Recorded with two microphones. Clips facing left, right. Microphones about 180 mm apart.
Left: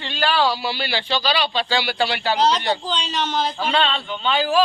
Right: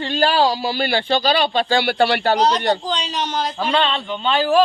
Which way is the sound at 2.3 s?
50° right (ahead or behind).